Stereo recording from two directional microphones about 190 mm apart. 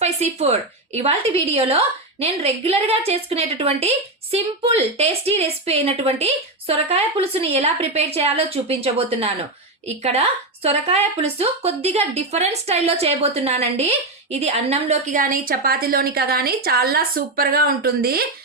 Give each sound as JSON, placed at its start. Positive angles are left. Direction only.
{"t": 0.0, "sound": "a woman's voice", "side_deg": -35}